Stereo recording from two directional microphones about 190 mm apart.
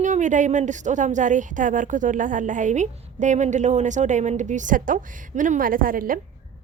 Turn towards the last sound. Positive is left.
turn(degrees=-45)  # may be behind; listen again after turning